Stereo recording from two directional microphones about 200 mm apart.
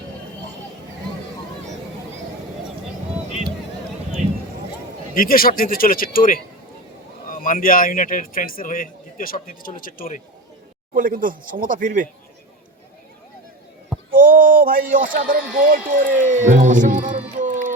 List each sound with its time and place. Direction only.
5.1 s speech: 45° left (ahead or behind)
10.9 s speech: 45° right (ahead or behind)
14.1 s speech: 45° right (ahead or behind)
17.3 s music: 40° right (ahead or behind)